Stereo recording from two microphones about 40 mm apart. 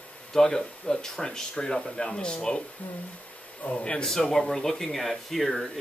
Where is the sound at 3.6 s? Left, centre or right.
Left.